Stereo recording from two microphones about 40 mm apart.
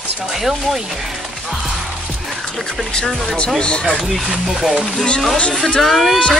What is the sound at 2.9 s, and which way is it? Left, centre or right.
Speech, centre.